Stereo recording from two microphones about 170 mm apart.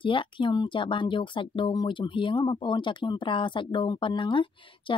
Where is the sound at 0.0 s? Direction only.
30° left (ahead or behind).